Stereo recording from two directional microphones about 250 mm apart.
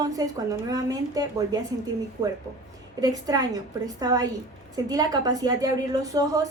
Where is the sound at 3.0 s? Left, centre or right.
Centre.